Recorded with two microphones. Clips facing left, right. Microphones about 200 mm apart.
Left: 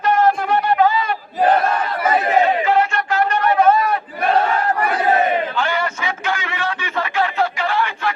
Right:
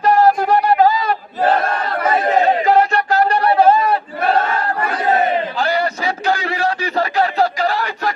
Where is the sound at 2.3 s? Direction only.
40° right (ahead or behind).